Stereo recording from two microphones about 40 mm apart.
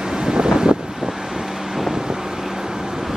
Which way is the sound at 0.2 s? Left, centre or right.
Centre.